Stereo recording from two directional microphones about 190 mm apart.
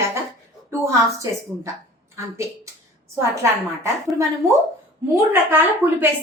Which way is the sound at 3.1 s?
15° right (ahead or behind).